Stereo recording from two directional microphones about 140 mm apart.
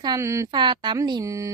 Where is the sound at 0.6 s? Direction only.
35° right (ahead or behind).